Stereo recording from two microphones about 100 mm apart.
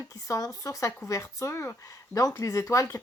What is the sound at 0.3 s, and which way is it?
Speech, 35° left (ahead or behind).